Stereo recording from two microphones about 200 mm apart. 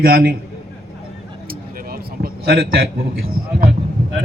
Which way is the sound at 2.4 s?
50° right (ahead or behind).